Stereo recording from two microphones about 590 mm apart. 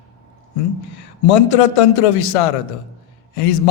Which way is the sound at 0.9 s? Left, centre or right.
Left.